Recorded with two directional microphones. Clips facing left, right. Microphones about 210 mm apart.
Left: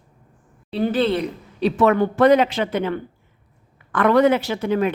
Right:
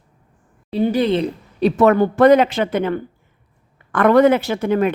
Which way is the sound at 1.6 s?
45° right (ahead or behind).